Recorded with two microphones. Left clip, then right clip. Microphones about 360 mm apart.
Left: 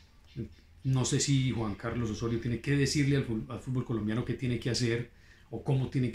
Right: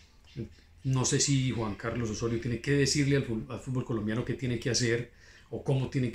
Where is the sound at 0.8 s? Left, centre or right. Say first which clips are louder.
Right 2 dB; centre.